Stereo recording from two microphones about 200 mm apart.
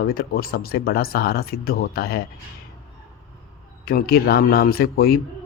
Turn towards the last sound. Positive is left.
turn(degrees=50)  # may be behind; listen again after turning